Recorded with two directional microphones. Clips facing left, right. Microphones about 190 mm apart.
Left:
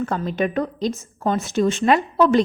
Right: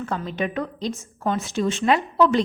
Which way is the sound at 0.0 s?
45° left (ahead or behind).